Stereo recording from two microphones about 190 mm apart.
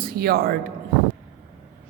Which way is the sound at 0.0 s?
55° right (ahead or behind).